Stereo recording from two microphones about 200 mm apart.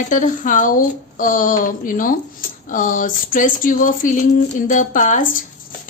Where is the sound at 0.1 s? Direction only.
40° left (ahead or behind).